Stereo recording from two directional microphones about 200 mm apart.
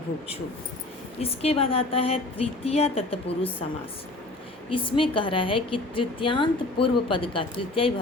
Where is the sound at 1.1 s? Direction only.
30° left (ahead or behind).